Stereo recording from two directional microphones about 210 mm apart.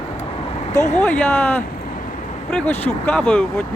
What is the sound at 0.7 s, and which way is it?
Speech, 35° left (ahead or behind).